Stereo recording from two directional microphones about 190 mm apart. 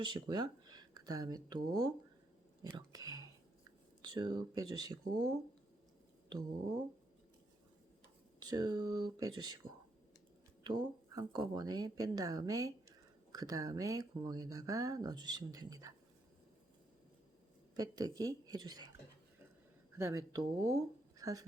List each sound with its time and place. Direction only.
0.0 s speech: 25° right (ahead or behind)
8.4 s speech: 20° right (ahead or behind)
10.6 s speech: 20° right (ahead or behind)
17.7 s speech: 20° right (ahead or behind)
20.0 s speech: 15° right (ahead or behind)